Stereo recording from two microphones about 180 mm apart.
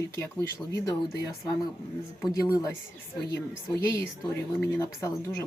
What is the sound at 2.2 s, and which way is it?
Speech, 20° left (ahead or behind).